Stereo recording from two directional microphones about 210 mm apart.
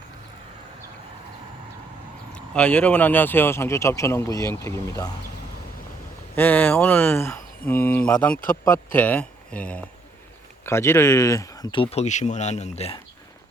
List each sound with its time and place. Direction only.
2.3 s speech: 5° left (ahead or behind)
6.3 s speech: 10° left (ahead or behind); by 13.0 s 30° left (ahead or behind)